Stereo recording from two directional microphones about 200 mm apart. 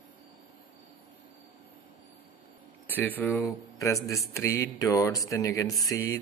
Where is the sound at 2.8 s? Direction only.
10° left (ahead or behind).